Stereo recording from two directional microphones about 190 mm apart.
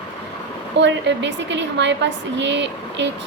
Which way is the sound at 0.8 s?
70° right (ahead or behind).